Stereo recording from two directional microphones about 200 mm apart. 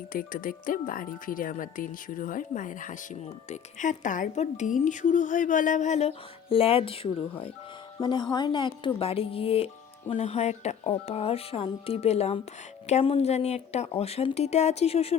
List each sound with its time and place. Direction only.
0.1 s speech: 45° left (ahead or behind)